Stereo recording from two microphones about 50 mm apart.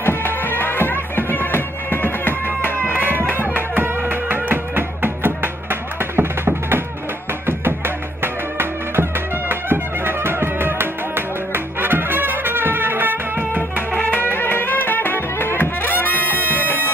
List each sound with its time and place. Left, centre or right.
0.0 s music: left
2.9 s music: right
13.9 s music: left